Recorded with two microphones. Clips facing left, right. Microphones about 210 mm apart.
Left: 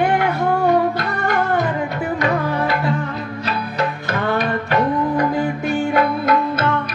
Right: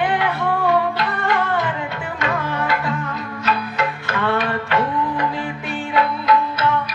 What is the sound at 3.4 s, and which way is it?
Music, 35° left (ahead or behind).